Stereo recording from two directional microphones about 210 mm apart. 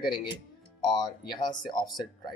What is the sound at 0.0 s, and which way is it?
Speech, 20° left (ahead or behind).